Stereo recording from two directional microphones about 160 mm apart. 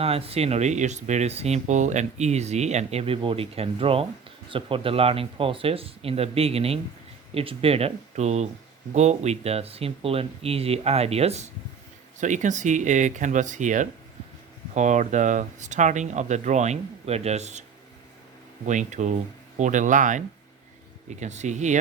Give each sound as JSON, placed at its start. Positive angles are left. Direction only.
{"t": 0.0, "sound": "speech", "side_deg": -40}
{"t": 18.6, "sound": "speech", "side_deg": -50}